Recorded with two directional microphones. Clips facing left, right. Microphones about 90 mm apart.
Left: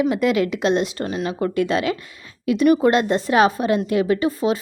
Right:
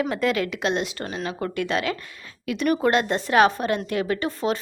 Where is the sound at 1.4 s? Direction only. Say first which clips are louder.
Left 5 dB; 25° left (ahead or behind).